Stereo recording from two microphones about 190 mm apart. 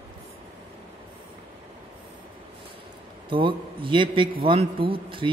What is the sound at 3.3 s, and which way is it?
A man's voice, 25° right (ahead or behind).